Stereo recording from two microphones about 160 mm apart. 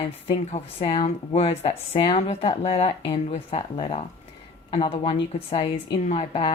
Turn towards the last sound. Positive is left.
turn(degrees=35)  # may be behind; listen again after turning